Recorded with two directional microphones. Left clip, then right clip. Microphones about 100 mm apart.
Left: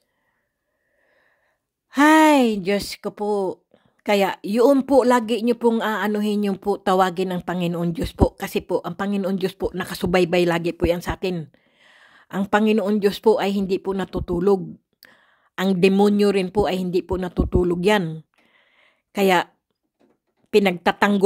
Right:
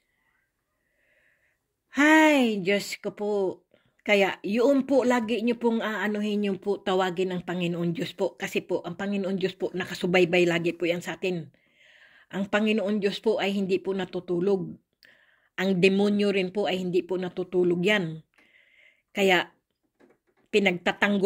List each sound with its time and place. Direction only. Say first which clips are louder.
2.0 s a sound: left 5 dB; 35° left (ahead or behind)
2.4 s a woman's voice: left 4 dB; 50° left (ahead or behind); by 5.8 s 70° left (ahead or behind)
5.8 s speech: left 6 dB; 50° left (ahead or behind)
6.0 s a woman's voice: left 5 dB; 80° left
8.6 s speech: left 6 dB; 90° left
10.1 s speech: left 3 dB; 55° left (ahead or behind)
11.1 s a sound: left 3 dB; 80° left; by 12.3 s 60° left (ahead or behind)
12.4 s a woman's voice: left 6 dB; 70° left (ahead or behind)
13.4 s a woman's voice: left 4 dB; 60° left (ahead or behind); by 14.6 s 90° left
16.0 s a woman's voice: left 7 dB; 75° left (ahead or behind)
16.6 s speech: left 4 dB; 60° left (ahead or behind)
19.1 s speech: left 4 dB; 40° left (ahead or behind)
20.4 s speech: left 6 dB; 55° left (ahead or behind)